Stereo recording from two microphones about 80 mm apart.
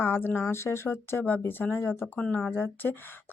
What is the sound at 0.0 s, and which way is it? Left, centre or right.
Speech, left.